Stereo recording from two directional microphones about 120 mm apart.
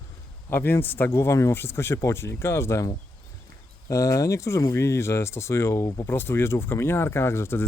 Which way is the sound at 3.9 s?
25° left (ahead or behind).